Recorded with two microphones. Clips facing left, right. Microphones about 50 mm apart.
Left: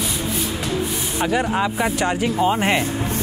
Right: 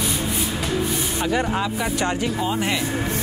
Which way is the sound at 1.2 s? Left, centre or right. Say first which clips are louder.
Left 3 dB; centre.